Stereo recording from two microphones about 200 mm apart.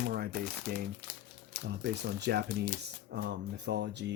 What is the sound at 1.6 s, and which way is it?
Speech, 55° right (ahead or behind).